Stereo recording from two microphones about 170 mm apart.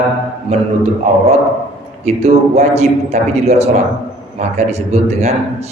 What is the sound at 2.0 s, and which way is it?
A man's voice, 40° right (ahead or behind).